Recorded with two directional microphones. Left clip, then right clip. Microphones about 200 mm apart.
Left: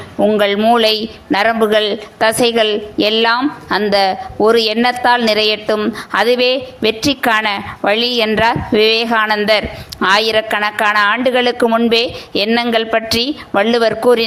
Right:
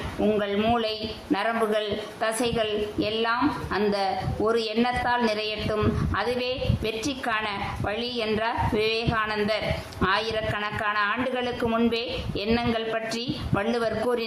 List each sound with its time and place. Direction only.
0.2 s speech: 25° left (ahead or behind)
0.7 s a woman's voice: 40° left (ahead or behind)